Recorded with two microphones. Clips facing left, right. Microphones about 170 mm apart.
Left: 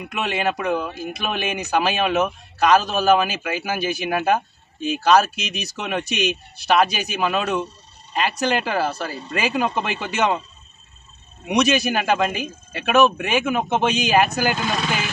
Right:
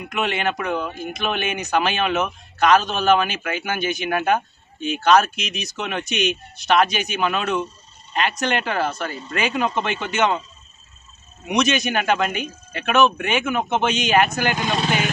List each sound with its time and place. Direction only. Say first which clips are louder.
0.1 s a man's voice: even; 5° left (ahead or behind)
11.4 s a man's voice: left 2 dB; 5° left (ahead or behind)
14.6 s speech: right 2 dB; 25° right (ahead or behind)